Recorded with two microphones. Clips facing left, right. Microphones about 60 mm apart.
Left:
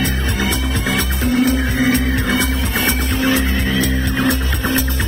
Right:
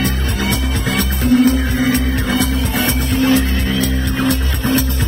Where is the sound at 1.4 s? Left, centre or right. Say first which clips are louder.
Right 2 dB; left.